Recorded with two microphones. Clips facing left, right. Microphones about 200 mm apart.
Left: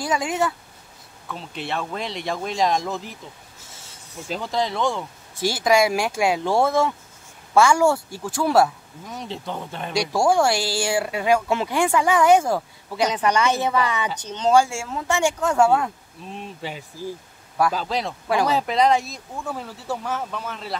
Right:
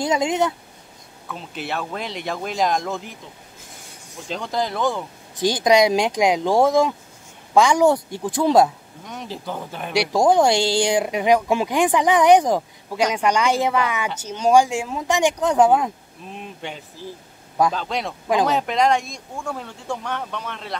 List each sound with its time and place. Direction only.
0.0 s a woman's voice: 20° right (ahead or behind)
1.3 s speech: centre (ahead or behind)
4.3 s speech: centre (ahead or behind)
5.4 s a woman's voice: 20° right (ahead or behind)
9.0 s speech: centre (ahead or behind)
9.9 s speech: 20° right (ahead or behind)
16.3 s speech: centre (ahead or behind)